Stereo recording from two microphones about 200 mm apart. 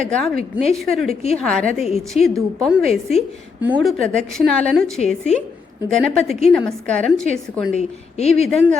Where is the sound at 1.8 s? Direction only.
30° left (ahead or behind).